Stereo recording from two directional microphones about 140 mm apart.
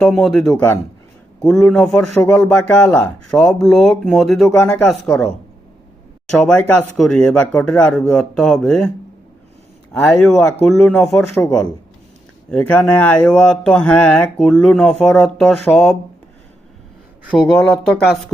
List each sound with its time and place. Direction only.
0.0 s speech: centre (ahead or behind)
4.4 s speech: 15° left (ahead or behind)
6.4 s speech: 5° left (ahead or behind)
9.9 s speech: 15° left (ahead or behind)
17.2 s speech: centre (ahead or behind)